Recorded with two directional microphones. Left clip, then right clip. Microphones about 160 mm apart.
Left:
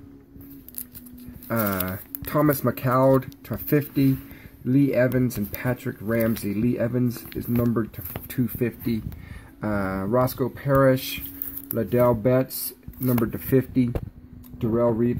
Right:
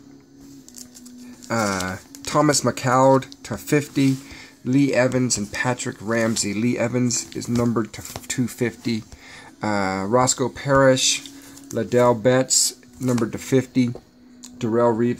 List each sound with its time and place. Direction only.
1.5 s speech: 5° right (ahead or behind)
2.4 s speech: 15° right (ahead or behind)